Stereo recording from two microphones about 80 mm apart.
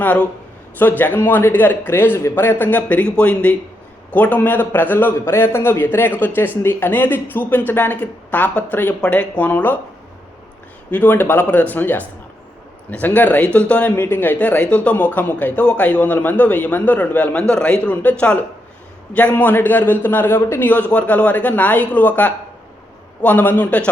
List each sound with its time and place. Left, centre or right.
0.0 s speech: centre
10.9 s speech: left
13.9 s speech: left